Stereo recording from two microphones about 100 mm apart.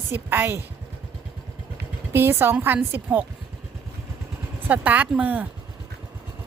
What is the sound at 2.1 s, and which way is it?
A woman's voice, 20° right (ahead or behind).